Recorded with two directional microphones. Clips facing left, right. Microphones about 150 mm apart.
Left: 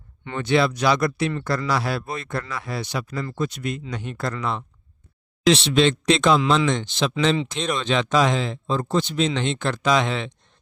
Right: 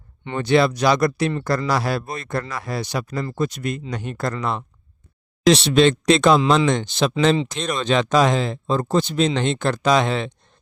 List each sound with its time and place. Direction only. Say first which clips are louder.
0.3 s speech: right 3 dB; 40° right (ahead or behind)